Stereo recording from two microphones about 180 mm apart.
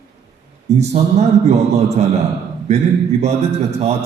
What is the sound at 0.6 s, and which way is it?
A man's voice, 35° right (ahead or behind).